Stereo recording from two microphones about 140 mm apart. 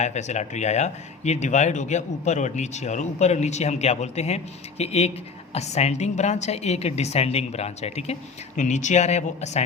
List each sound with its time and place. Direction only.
0.0 s a woman's voice: 55° left (ahead or behind)